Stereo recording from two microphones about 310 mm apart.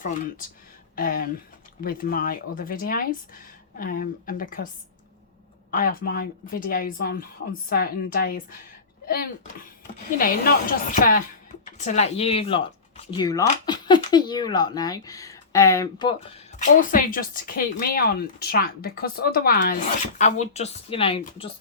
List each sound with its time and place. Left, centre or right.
0.9 s speech: left
5.7 s speech: left
16.8 s speech: left